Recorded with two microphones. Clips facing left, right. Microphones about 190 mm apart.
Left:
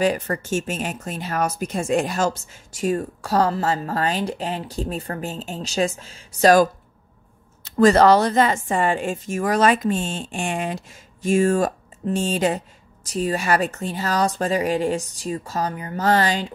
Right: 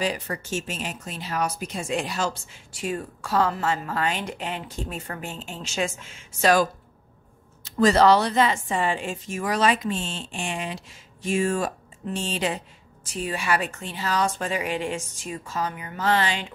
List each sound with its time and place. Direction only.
0.0 s a woman's voice: 50° left (ahead or behind)